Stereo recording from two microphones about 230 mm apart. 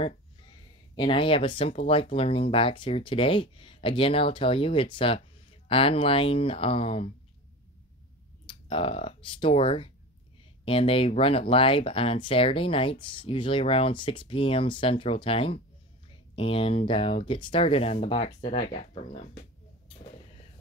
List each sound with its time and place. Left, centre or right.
0.9 s speech: left
8.5 s speech: left